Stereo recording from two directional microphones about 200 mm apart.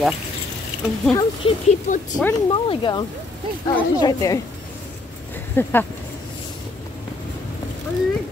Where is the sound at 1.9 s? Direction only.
40° left (ahead or behind).